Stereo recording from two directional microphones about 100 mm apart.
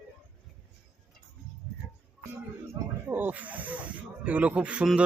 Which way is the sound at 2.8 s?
40° right (ahead or behind).